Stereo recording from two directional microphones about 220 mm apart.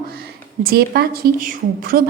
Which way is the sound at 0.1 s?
45° right (ahead or behind).